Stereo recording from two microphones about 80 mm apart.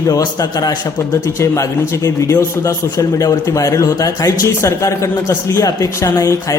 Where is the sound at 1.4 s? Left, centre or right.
Left.